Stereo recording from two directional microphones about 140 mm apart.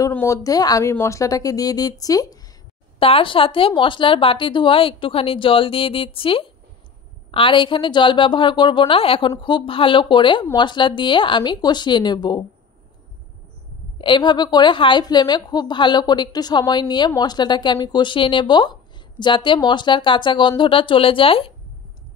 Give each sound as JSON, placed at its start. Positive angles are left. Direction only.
{"t": 0.1, "sound": "speech", "side_deg": 20}
{"t": 3.0, "sound": "a woman's voice", "side_deg": 40}
{"t": 13.9, "sound": "a woman's voice", "side_deg": 35}